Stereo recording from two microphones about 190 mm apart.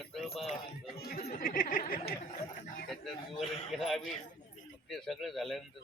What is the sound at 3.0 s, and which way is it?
Speech, 30° left (ahead or behind).